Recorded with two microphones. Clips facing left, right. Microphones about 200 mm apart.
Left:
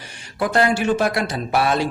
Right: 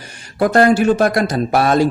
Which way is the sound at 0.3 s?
45° right (ahead or behind).